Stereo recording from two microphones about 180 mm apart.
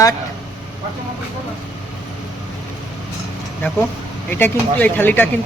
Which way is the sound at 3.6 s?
10° left (ahead or behind).